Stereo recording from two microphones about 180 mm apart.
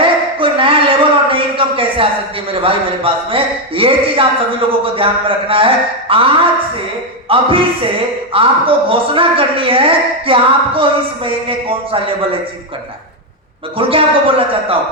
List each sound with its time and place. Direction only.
0.0 s a sound: 30° right (ahead or behind)
2.5 s a woman's voice: 30° right (ahead or behind)
5.5 s a woman's voice: 30° right (ahead or behind)
13.7 s a woman's voice: 30° right (ahead or behind)